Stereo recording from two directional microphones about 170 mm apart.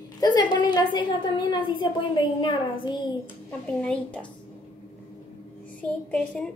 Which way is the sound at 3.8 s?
5° left (ahead or behind).